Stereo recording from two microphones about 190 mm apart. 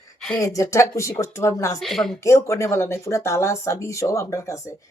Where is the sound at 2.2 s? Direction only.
15° left (ahead or behind).